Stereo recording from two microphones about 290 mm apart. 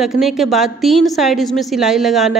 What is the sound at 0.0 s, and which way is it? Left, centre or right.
A woman's voice, centre.